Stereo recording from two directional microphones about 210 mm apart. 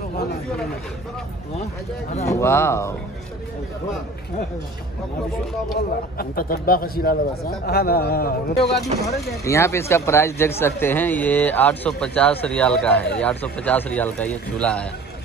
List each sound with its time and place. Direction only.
2.2 s speech: 15° left (ahead or behind)
5.8 s speech: 45° left (ahead or behind)
9.4 s speech: 15° left (ahead or behind)